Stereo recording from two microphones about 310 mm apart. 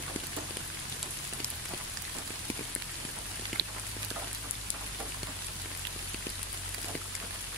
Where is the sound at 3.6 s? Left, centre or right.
Right.